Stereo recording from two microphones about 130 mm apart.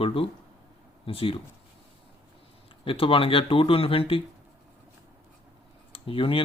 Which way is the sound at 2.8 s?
45° left (ahead or behind).